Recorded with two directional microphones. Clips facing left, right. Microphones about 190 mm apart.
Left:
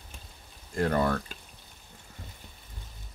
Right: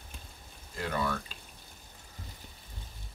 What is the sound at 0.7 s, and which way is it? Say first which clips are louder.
Speech: left 7 dB; 50° left (ahead or behind).